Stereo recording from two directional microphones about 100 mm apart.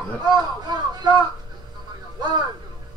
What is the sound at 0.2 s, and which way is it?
Speech, 45° right (ahead or behind).